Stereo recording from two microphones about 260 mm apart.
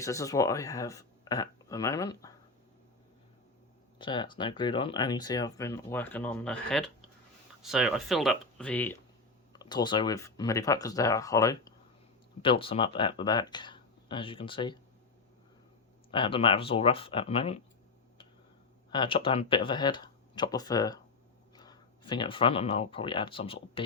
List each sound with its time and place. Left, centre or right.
0.0 s speech: centre
3.9 s speech: centre
16.1 s speech: centre
18.9 s speech: centre